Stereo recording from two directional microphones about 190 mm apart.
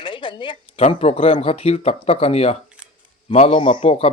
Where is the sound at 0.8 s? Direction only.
35° left (ahead or behind).